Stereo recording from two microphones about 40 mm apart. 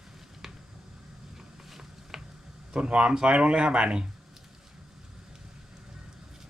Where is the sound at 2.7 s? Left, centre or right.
Right.